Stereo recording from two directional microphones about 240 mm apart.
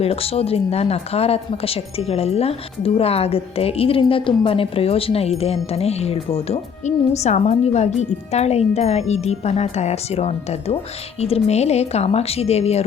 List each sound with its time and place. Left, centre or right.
0.0 s speech: left